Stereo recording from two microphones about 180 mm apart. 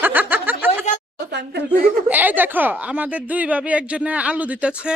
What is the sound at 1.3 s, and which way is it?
Speech, 70° right (ahead or behind).